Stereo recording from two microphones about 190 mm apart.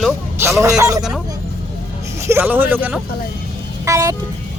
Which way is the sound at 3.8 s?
15° right (ahead or behind).